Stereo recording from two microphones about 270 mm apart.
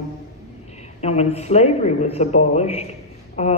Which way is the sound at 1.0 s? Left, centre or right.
Left.